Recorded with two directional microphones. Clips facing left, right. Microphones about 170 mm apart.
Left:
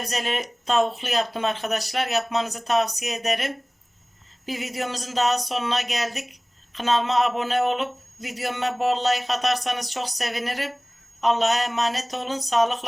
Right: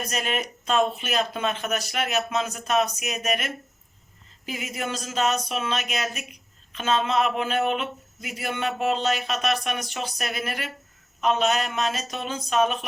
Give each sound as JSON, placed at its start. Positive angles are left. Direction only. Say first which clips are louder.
{"t": 0.0, "sound": "speech", "louder": "even", "side_deg": 35}